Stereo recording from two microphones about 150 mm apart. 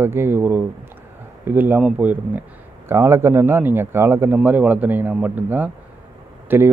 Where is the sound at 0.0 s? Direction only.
15° right (ahead or behind).